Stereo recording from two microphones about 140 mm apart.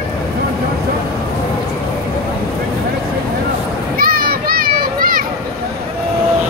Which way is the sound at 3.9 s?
90° right.